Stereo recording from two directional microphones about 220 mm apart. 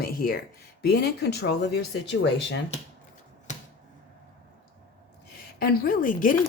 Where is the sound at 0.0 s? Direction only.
40° left (ahead or behind).